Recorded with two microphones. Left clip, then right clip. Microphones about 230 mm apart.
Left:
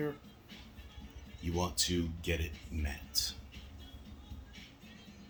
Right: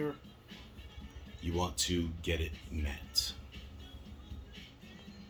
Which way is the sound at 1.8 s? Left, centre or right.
Left.